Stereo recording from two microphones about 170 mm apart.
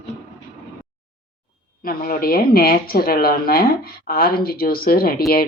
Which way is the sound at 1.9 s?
55° left (ahead or behind).